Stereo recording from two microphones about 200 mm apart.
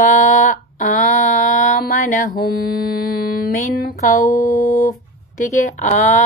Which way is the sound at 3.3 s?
45° left (ahead or behind).